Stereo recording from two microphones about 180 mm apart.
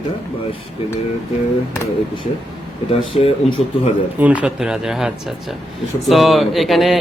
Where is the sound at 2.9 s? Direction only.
30° left (ahead or behind).